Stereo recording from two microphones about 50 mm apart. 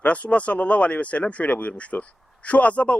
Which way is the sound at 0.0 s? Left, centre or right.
Left.